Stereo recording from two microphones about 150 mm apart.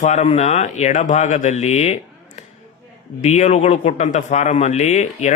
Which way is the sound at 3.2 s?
50° left (ahead or behind).